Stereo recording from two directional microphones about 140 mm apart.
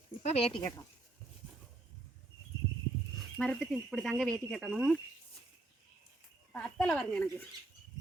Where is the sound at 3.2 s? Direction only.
5° left (ahead or behind).